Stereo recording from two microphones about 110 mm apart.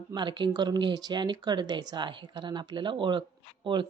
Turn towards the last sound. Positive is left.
turn(degrees=-45)  # may be behind; listen again after turning